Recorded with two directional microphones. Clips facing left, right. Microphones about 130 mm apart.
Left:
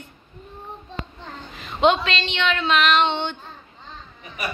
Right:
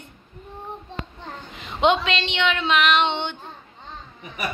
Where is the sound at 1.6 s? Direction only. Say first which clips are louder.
Left 1 dB; 20° right (ahead or behind).